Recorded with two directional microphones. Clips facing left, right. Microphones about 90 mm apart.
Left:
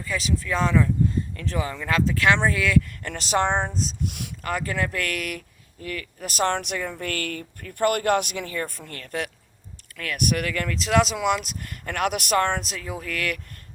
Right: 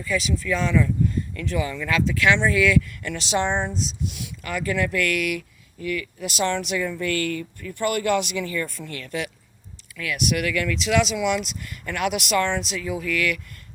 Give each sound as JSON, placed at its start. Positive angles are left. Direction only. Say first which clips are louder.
{"t": 0.0, "sound": "speech", "louder": "right 2 dB", "side_deg": 35}
{"t": 4.4, "sound": "speech", "louder": "right 2 dB", "side_deg": 35}